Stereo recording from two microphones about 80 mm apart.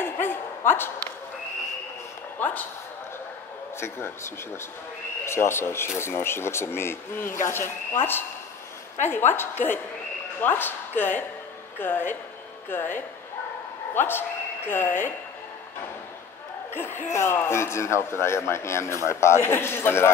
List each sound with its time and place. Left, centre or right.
0.0 s a sound: left
2.4 s a woman's voice: left
3.8 s a man's voice: left
16.7 s a man's voice: left